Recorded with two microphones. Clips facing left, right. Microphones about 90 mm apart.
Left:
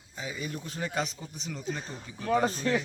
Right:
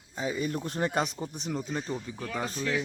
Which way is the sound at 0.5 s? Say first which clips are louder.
Right 4 dB; 50° right (ahead or behind).